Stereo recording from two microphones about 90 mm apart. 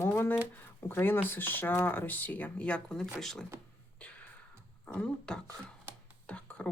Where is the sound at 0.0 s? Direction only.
25° left (ahead or behind).